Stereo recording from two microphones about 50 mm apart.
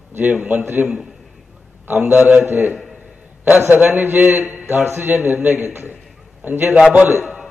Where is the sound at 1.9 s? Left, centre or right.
Right.